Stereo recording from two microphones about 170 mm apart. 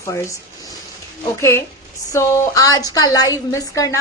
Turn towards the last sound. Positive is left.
turn(degrees=20)  # may be behind; listen again after turning